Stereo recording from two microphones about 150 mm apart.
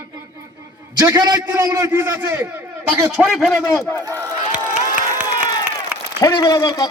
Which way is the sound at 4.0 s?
20° right (ahead or behind).